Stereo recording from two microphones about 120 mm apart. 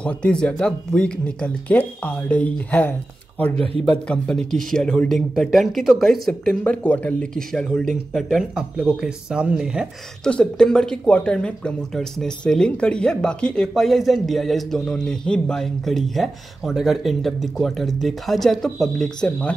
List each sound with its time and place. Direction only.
0.0 s speech: 10° left (ahead or behind)
3.5 s speech: 55° right (ahead or behind)
4.1 s speech: 5° left (ahead or behind)
10.2 s speech: 5° left (ahead or behind)